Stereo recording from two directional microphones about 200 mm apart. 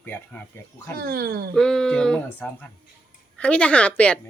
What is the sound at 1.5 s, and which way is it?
Speech, 5° left (ahead or behind).